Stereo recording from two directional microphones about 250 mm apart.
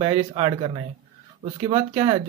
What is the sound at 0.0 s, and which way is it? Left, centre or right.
Speech, right.